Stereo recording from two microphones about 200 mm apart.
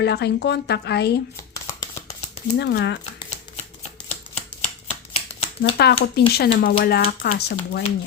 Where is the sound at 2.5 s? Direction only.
55° left (ahead or behind).